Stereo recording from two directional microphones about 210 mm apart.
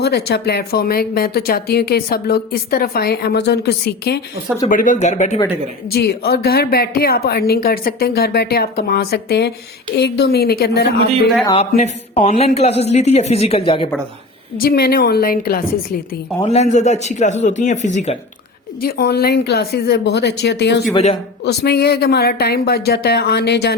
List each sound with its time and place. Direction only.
0.0 s speech: 50° left (ahead or behind)
4.7 s a man's voice: 40° left (ahead or behind)
5.9 s speech: 50° left (ahead or behind)
11.4 s a man's voice: 25° left (ahead or behind)
14.6 s speech: 45° left (ahead or behind)
16.4 s a man's voice: 30° left (ahead or behind)
18.8 s speech: 50° left (ahead or behind)
20.9 s a man's voice: 30° left (ahead or behind)
21.4 s speech: 50° left (ahead or behind)